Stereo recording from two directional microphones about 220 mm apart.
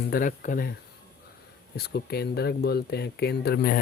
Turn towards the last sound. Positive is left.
turn(degrees=45)  # may be behind; listen again after turning